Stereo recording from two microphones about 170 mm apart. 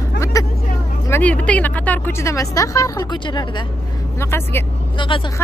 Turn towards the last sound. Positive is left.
turn(degrees=30)  # may be behind; listen again after turning